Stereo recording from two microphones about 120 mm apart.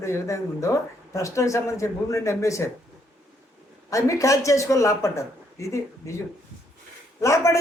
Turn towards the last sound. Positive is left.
turn(degrees=25)  # may be behind; listen again after turning